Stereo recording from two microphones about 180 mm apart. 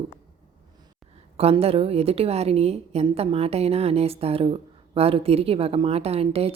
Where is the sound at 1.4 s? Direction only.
35° right (ahead or behind).